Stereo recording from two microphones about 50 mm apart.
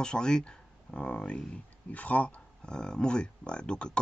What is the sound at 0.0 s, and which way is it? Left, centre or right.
Speech, centre.